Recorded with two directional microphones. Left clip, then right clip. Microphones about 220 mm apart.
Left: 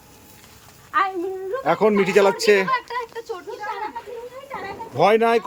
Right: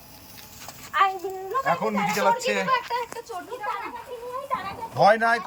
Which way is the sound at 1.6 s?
30° left (ahead or behind).